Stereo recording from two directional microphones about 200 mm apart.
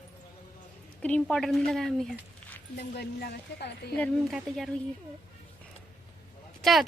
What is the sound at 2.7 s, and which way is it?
Speech, 55° left (ahead or behind).